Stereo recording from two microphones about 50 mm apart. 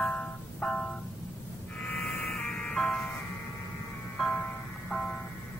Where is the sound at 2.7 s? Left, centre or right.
Centre.